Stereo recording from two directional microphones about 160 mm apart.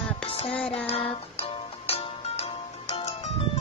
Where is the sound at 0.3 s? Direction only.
40° left (ahead or behind).